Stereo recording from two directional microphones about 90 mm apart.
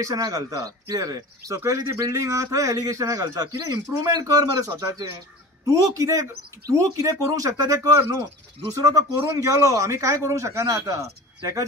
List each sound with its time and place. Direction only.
0.0 s speech: 40° right (ahead or behind)